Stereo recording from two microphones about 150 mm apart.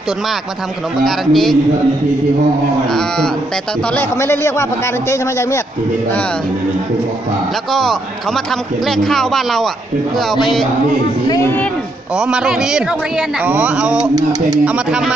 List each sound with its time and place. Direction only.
1.0 s a man's voice: centre (ahead or behind)
3.9 s speech: 15° left (ahead or behind)
7.7 s a man's voice: centre (ahead or behind)
11.2 s speech: 25° left (ahead or behind)
12.2 s a man's voice: 5° right (ahead or behind)